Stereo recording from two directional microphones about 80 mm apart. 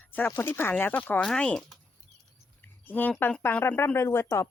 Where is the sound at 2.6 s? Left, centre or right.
Left.